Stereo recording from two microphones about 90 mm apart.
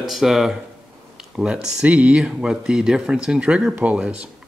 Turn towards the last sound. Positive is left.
turn(degrees=-15)  # may be behind; listen again after turning